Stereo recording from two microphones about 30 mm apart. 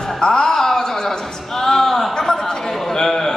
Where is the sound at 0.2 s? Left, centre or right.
Left.